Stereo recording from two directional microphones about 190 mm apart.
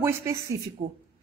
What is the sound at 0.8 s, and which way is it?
Speech, 35° right (ahead or behind).